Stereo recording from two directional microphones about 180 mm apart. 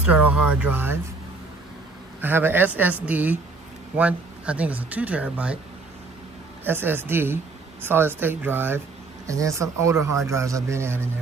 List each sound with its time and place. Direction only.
0.0 s speech: 10° right (ahead or behind)
2.2 s speech: 10° right (ahead or behind)
6.6 s speech: 10° right (ahead or behind)